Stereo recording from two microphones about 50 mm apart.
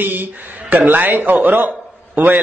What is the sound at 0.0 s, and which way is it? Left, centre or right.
Speech, right.